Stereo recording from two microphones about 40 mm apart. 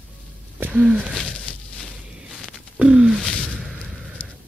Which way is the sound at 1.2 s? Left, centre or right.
Left.